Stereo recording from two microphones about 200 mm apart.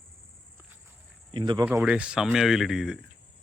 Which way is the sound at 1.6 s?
5° right (ahead or behind).